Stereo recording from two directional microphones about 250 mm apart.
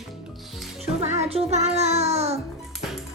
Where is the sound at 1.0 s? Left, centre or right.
Right.